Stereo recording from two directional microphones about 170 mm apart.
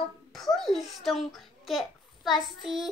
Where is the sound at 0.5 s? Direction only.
Centre (ahead or behind).